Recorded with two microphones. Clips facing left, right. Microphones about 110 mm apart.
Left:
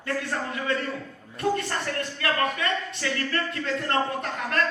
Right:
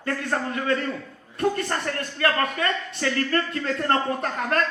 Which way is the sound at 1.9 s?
45° right (ahead or behind).